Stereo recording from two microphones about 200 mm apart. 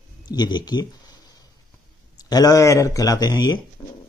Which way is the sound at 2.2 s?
20° left (ahead or behind).